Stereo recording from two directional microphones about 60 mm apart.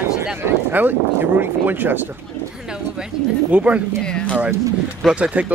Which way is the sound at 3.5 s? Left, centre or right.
Right.